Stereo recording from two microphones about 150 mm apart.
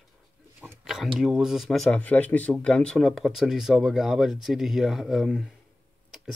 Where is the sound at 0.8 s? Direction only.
Centre (ahead or behind).